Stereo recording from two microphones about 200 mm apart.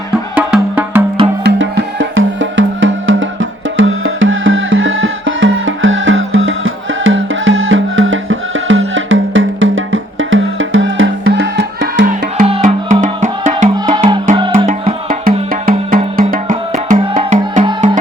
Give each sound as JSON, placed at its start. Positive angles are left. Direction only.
{"t": 0.1, "sound": "music", "side_deg": -5}
{"t": 1.5, "sound": "music", "side_deg": -70}
{"t": 12.6, "sound": "music", "side_deg": -40}
{"t": 13.7, "sound": "music", "side_deg": -25}
{"t": 14.7, "sound": "music", "side_deg": -40}